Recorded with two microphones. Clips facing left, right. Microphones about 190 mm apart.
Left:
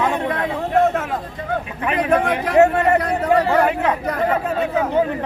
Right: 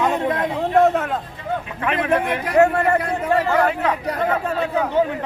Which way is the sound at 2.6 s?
20° left (ahead or behind).